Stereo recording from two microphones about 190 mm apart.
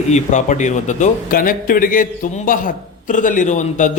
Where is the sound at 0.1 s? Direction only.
40° left (ahead or behind).